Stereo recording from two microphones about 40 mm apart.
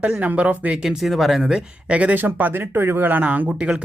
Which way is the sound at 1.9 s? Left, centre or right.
Right.